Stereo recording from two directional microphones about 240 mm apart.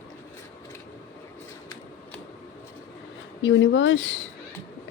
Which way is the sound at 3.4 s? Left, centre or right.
Left.